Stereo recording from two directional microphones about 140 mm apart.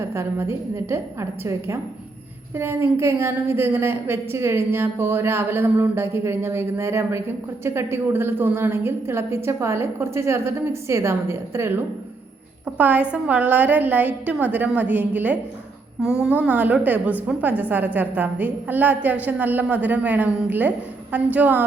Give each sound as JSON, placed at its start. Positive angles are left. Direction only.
{"t": 0.0, "sound": "a woman's voice", "side_deg": -20}